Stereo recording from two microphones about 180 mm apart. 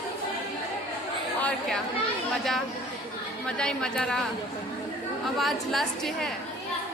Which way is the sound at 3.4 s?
5° left (ahead or behind).